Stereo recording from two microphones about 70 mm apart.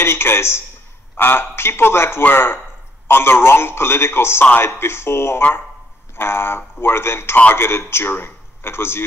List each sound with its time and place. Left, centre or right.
0.0 s a man's voice: left